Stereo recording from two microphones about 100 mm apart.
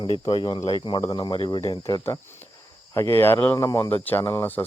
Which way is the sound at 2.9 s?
30° left (ahead or behind).